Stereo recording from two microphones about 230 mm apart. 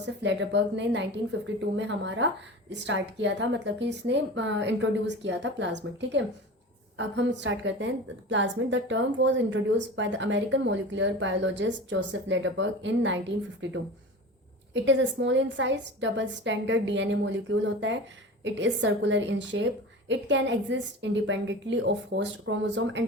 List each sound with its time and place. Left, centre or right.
0.0 s a woman's voice: right
14.7 s a woman's voice: right